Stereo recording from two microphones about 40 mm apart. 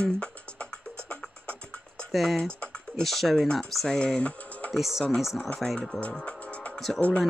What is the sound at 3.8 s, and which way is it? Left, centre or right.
Speech, left.